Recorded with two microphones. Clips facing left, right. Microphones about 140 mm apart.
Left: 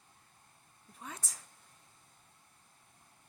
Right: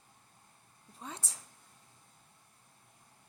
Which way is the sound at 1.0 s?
30° right (ahead or behind).